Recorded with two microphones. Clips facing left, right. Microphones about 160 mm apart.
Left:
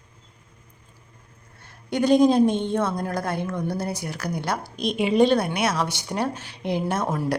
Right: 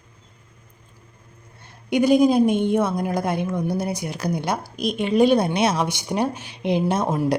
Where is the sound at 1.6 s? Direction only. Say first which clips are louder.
Right 4 dB; 15° right (ahead or behind).